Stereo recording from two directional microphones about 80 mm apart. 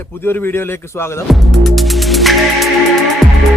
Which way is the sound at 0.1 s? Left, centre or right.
Left.